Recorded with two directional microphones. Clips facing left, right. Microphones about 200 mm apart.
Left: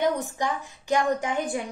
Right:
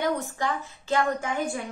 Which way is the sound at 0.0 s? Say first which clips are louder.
Left 2 dB; 15° left (ahead or behind).